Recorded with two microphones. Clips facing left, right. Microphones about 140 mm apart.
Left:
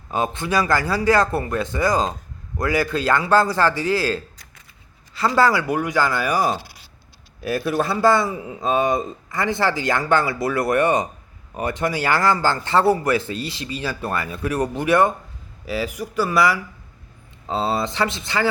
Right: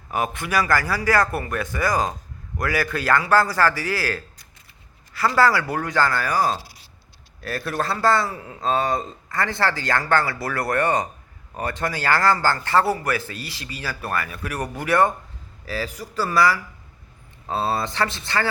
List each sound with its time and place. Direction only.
0.1 s a man's voice: 25° left (ahead or behind)